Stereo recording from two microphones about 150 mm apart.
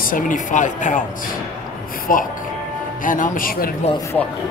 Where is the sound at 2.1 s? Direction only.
65° left (ahead or behind).